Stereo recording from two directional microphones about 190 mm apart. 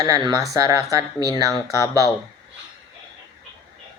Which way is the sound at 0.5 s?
20° right (ahead or behind).